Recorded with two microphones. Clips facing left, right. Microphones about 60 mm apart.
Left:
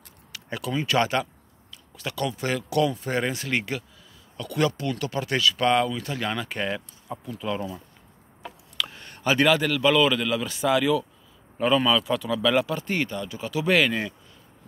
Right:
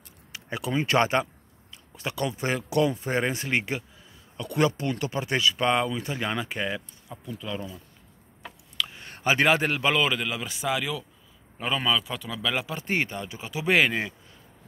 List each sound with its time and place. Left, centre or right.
0.3 s a sound: right
0.8 s speech: right; by 7.7 s centre
9.0 s a man's voice: right; by 12.7 s centre
12.7 s speech: right